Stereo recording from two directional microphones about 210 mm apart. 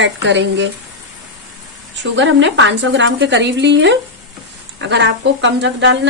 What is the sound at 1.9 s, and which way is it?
A woman's voice, 60° right (ahead or behind).